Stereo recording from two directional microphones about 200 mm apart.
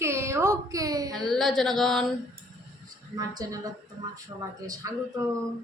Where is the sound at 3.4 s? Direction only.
15° right (ahead or behind).